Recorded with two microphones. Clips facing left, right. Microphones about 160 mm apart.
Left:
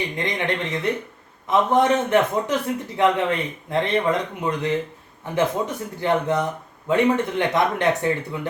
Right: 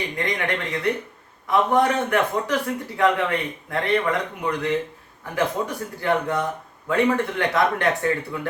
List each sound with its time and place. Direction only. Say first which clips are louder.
0.2 s a man's voice: even; 20° left (ahead or behind)